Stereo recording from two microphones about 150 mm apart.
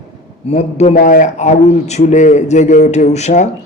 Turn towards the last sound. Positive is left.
turn(degrees=50)  # may be behind; listen again after turning